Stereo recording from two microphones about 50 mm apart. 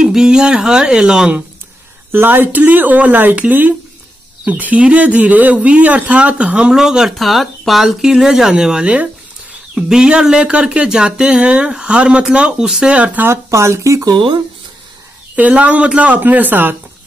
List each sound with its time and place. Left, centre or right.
0.0 s speech: centre
2.1 s speech: right; by 7.2 s centre
7.2 s speech: centre
8.8 s speech: right
9.8 s speech: centre
13.3 s speech: right
15.3 s speech: right